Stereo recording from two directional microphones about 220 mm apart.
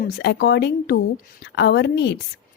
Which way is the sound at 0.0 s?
50° left (ahead or behind).